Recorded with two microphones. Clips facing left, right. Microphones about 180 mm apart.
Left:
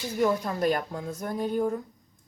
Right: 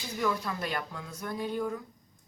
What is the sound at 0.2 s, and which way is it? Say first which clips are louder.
Speech: left 6 dB; 40° left (ahead or behind).